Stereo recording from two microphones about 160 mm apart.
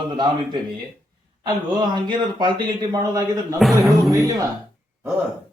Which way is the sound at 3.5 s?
Centre (ahead or behind).